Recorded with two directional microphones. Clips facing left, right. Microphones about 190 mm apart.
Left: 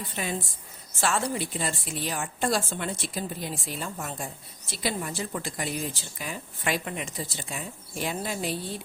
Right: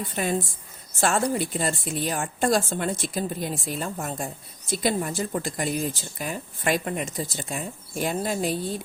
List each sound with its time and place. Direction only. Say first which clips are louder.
0.2 s a woman's voice: right 6 dB; 45° right (ahead or behind)